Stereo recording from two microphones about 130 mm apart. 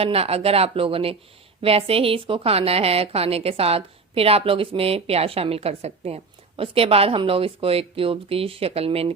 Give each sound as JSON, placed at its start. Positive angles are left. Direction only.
{"t": 0.0, "sound": "a woman's voice", "side_deg": -50}